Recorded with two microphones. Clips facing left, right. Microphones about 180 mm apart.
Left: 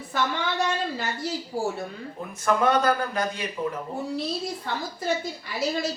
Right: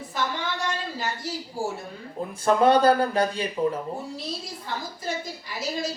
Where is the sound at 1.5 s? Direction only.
60° left (ahead or behind).